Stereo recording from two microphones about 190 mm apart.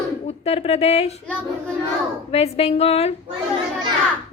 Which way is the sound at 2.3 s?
35° left (ahead or behind).